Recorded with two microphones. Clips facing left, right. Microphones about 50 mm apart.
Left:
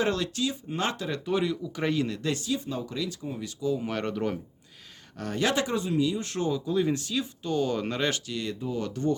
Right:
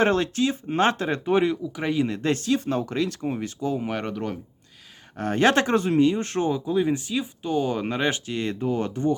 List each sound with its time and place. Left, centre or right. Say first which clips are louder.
0.0 s speech: right 6 dB; right
1.6 s speech: right 3 dB; centre
2.0 s speech: right 6 dB; right
3.8 s speech: right 2 dB; centre
4.1 s speech: even; centre
5.1 s speech: right 7 dB; right
6.7 s speech: right 3 dB; centre
8.3 s speech: right 6 dB; right
8.8 s speech: right 1 dB; right